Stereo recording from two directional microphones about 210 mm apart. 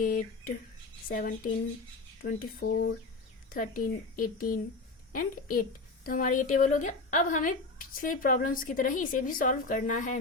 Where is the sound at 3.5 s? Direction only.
40° left (ahead or behind).